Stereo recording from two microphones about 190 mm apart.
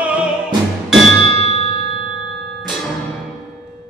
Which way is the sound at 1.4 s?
30° left (ahead or behind).